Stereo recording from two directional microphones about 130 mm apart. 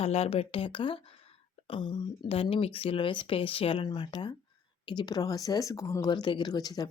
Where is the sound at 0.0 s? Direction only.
50° left (ahead or behind).